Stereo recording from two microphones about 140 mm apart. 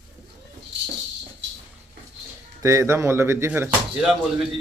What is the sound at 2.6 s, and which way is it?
A man's voice, 20° right (ahead or behind).